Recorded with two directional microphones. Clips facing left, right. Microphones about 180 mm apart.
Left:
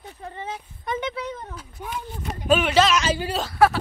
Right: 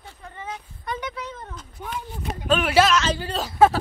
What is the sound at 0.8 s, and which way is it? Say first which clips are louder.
Speech: left 4 dB; 20° left (ahead or behind).